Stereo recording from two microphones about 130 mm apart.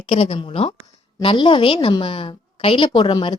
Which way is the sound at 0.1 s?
55° left (ahead or behind).